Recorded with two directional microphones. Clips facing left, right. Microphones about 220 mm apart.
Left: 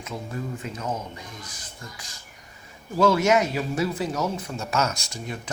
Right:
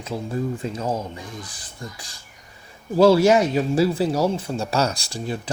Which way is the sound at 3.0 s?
30° right (ahead or behind).